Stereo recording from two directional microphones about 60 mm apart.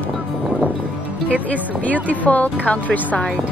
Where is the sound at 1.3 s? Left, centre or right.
Left.